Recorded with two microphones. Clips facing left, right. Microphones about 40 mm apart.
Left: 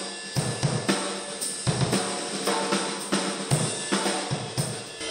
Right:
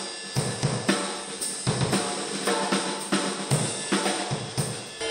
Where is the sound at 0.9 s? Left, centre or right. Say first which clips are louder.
Right 1 dB; centre.